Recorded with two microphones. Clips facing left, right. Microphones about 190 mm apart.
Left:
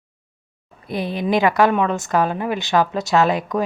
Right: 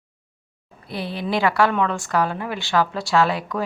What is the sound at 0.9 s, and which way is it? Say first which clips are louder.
A woman's voice: left 5 dB; 20° left (ahead or behind).